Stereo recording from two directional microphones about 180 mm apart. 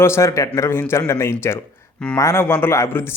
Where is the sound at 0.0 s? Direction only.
15° left (ahead or behind).